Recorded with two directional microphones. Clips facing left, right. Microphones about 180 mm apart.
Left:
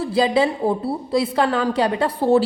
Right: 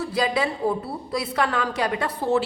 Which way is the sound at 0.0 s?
30° left (ahead or behind).